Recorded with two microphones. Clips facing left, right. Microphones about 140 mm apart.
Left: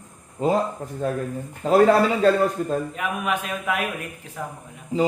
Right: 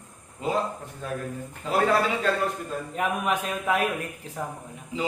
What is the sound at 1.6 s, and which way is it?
Speech, 40° left (ahead or behind).